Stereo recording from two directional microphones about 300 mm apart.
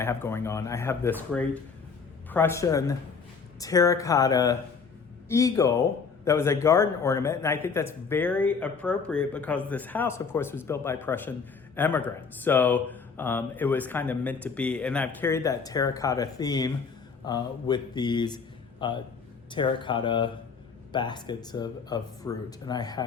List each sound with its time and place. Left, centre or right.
0.0 s a man's voice: centre